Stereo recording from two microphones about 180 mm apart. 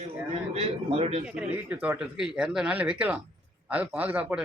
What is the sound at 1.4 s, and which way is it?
A man's voice, 10° right (ahead or behind).